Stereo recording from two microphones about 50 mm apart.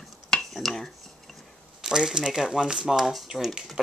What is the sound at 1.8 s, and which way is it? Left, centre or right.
Speech, centre.